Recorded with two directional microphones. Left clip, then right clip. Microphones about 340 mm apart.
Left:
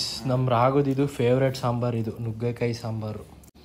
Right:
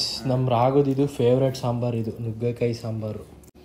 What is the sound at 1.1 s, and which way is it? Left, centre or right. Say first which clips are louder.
Speech: right 2 dB; centre.